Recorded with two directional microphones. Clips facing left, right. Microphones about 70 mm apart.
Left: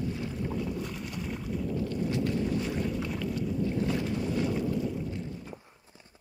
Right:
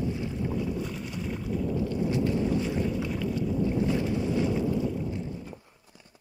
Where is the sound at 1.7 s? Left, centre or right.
Right.